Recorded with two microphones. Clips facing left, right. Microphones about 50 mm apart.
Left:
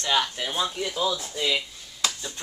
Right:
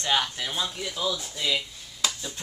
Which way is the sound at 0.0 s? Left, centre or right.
Centre.